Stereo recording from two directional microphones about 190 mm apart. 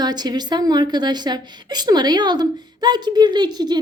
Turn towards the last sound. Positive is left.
turn(degrees=-20)  # may be behind; listen again after turning